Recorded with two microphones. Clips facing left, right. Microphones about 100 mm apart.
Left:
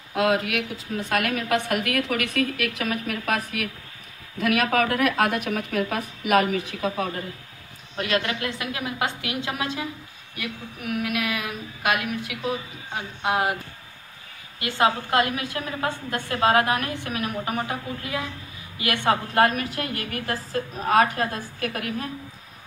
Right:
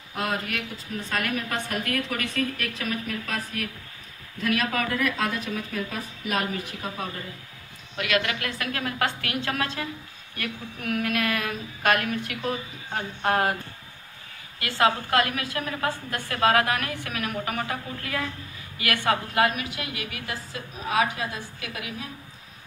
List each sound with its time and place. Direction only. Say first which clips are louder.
0.1 s a woman's voice: left 7 dB; 90° left
8.0 s a woman's voice: left 1 dB; 30° left (ahead or behind); by 13.6 s 10° left (ahead or behind)
14.6 s a woman's voice: left 1 dB; 20° left (ahead or behind)
19.3 s a woman's voice: left 3 dB; 40° left (ahead or behind)